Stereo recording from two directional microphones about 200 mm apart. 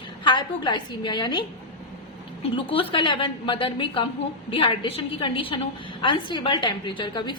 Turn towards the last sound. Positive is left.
turn(degrees=20)  # may be behind; listen again after turning